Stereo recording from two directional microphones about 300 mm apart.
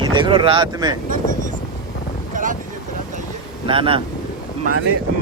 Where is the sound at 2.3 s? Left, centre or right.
Right.